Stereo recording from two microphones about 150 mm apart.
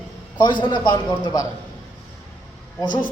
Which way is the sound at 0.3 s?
35° left (ahead or behind).